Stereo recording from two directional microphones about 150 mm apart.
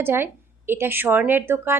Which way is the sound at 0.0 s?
15° right (ahead or behind).